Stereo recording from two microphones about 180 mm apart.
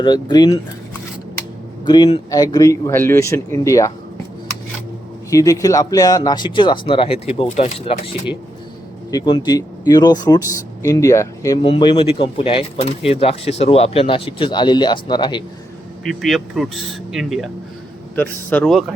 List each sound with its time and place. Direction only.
0.0 s speech: 25° left (ahead or behind)
1.9 s a man's voice: 25° left (ahead or behind)
5.3 s speech: 20° left (ahead or behind); by 8.1 s 35° left (ahead or behind)
9.0 s speech: 25° left (ahead or behind)
11.6 s speech: 30° left (ahead or behind)
16.0 s speech: centre (ahead or behind)